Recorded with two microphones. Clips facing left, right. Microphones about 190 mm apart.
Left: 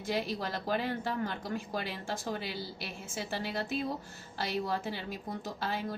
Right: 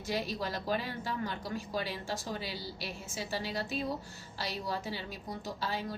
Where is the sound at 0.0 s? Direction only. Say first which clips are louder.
Left 1 dB; 50° left (ahead or behind).